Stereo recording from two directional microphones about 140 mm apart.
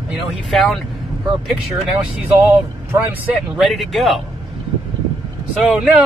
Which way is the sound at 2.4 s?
15° right (ahead or behind).